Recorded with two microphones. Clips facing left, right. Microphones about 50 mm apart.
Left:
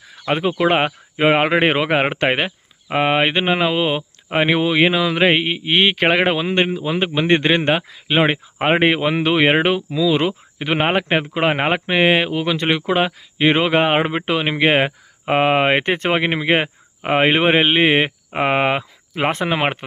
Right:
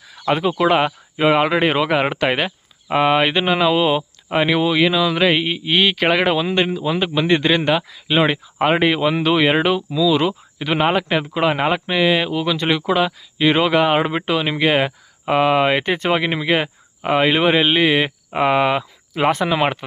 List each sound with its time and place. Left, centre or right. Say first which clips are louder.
0.3 s speech: right 1 dB; left